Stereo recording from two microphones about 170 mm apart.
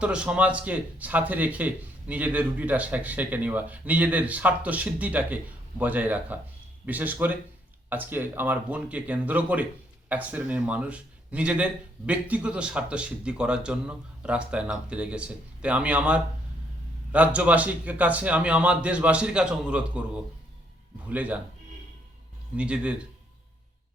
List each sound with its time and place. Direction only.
0.0 s speech: 5° right (ahead or behind)
22.5 s speech: 5° right (ahead or behind)